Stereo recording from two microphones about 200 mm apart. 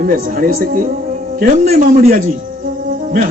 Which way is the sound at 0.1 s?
45° right (ahead or behind).